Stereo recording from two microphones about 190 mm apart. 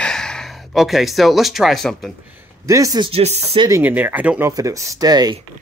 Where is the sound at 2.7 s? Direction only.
15° right (ahead or behind); by 3.4 s 30° right (ahead or behind).